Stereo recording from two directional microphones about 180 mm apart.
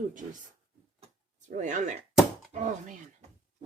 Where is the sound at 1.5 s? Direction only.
40° right (ahead or behind).